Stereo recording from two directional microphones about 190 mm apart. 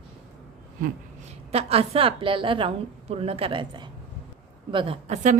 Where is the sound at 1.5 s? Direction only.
30° right (ahead or behind).